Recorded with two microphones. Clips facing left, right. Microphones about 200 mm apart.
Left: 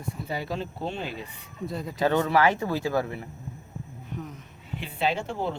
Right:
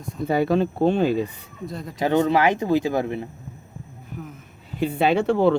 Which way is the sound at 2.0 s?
20° right (ahead or behind).